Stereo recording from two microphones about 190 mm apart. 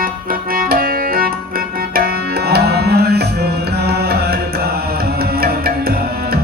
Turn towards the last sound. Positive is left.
turn(degrees=-55)  # may be behind; listen again after turning